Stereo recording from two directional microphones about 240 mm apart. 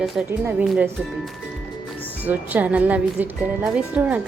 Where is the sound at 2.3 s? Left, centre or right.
Centre.